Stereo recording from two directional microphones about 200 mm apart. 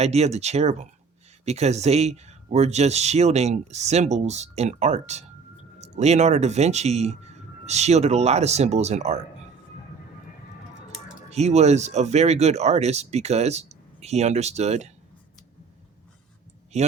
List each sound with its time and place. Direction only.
0.0 s speech: 30° right (ahead or behind)
11.3 s speech: 35° right (ahead or behind)
16.7 s speech: 35° right (ahead or behind)